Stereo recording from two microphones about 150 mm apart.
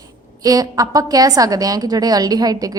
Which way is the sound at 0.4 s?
25° right (ahead or behind).